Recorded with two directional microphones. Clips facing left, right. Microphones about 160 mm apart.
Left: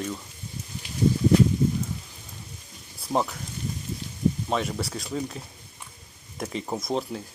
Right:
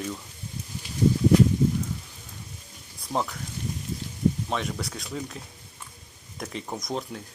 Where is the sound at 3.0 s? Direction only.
5° left (ahead or behind).